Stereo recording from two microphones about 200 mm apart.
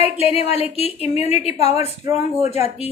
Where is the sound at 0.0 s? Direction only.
30° left (ahead or behind).